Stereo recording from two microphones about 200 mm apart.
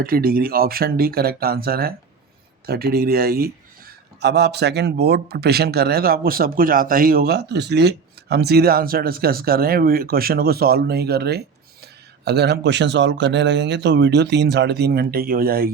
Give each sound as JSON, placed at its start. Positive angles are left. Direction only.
{"t": 0.0, "sound": "a man's voice", "side_deg": -50}